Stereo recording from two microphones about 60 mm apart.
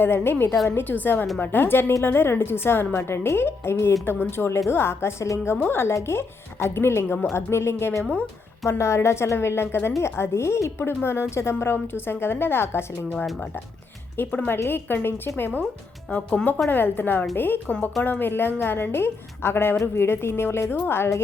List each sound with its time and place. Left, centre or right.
0.0 s a woman's voice: left
14.3 s a woman's voice: left